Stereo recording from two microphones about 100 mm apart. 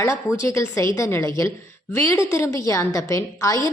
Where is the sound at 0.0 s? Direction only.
30° left (ahead or behind).